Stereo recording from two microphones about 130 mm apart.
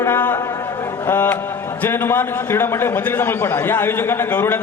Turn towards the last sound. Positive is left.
turn(degrees=15)  # may be behind; listen again after turning